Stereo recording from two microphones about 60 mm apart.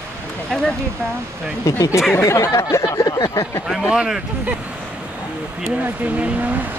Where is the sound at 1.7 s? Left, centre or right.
Left.